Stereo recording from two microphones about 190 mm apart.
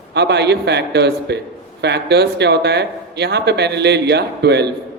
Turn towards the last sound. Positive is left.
turn(degrees=-60)  # may be behind; listen again after turning